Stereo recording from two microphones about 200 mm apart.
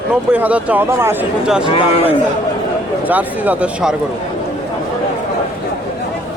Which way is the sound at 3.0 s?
10° right (ahead or behind).